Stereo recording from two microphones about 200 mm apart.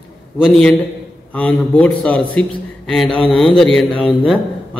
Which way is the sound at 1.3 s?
5° left (ahead or behind).